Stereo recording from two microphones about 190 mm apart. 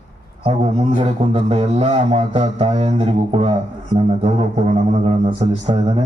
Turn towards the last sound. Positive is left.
turn(degrees=-30)  # may be behind; listen again after turning